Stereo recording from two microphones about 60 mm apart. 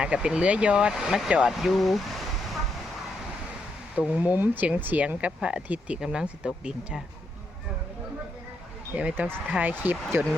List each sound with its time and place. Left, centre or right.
0.0 s speech: centre
3.9 s speech: right
8.9 s speech: right